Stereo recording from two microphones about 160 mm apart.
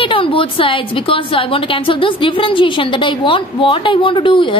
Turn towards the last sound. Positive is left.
turn(degrees=30)  # may be behind; listen again after turning